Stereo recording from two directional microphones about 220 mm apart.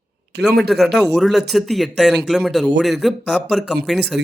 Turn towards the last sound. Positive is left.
turn(degrees=0)  # may be behind; listen again after turning